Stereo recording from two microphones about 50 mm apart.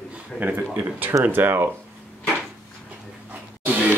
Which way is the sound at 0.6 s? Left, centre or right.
Right.